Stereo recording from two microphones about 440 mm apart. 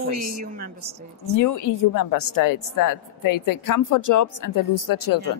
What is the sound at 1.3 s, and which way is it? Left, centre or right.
A woman's voice, left.